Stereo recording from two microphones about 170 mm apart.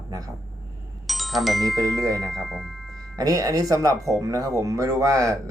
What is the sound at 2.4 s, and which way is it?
Music, centre (ahead or behind).